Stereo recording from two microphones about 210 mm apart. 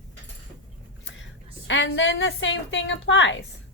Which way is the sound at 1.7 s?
60° left (ahead or behind).